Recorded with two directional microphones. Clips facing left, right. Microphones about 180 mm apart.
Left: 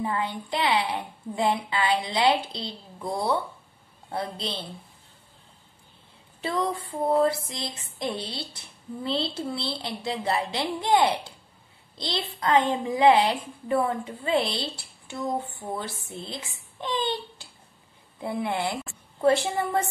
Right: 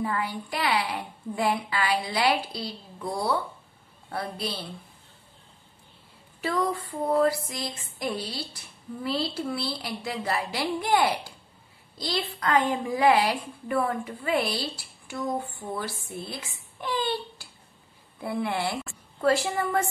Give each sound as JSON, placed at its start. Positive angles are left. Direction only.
{"t": 0.0, "sound": "a woman's voice", "side_deg": 20}
{"t": 6.4, "sound": "a woman's voice", "side_deg": 25}